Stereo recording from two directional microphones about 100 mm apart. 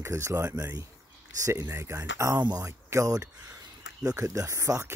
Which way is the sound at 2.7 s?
30° right (ahead or behind).